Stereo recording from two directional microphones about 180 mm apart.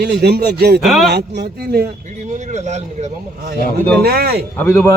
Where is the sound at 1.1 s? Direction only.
65° right (ahead or behind).